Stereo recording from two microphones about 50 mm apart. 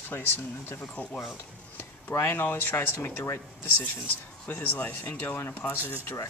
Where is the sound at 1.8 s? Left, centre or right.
Left.